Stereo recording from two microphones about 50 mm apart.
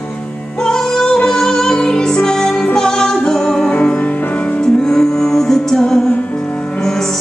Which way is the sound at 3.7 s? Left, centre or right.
Left.